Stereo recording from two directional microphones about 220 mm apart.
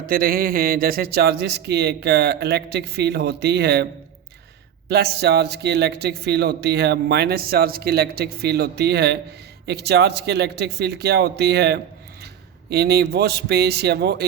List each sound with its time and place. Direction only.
0.0 s speech: 40° right (ahead or behind)
4.9 s speech: 45° right (ahead or behind)